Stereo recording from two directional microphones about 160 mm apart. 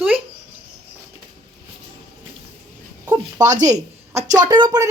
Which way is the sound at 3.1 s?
25° right (ahead or behind).